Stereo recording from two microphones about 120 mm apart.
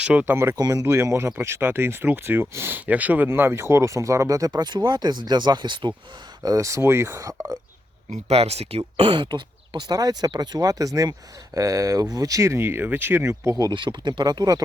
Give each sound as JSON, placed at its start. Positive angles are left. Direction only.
{"t": 0.0, "sound": "speech", "side_deg": -10}
{"t": 0.5, "sound": "speech", "side_deg": -30}
{"t": 6.4, "sound": "speech", "side_deg": -25}
{"t": 8.1, "sound": "speech", "side_deg": -60}